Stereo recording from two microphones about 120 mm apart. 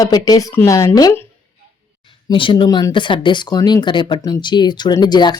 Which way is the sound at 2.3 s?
45° left (ahead or behind).